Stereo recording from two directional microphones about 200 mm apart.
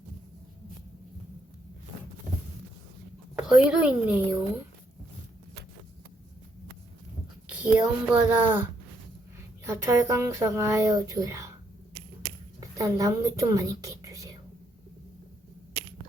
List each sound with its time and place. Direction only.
3.4 s a woman's voice: 5° right (ahead or behind)
7.5 s speech: 5° right (ahead or behind)
12.5 s a woman's voice: 15° right (ahead or behind)